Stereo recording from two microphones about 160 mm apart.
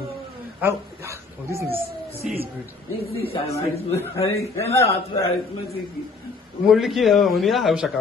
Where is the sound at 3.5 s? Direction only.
15° left (ahead or behind).